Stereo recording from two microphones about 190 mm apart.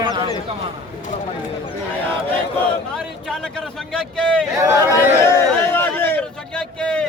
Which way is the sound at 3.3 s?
5° left (ahead or behind).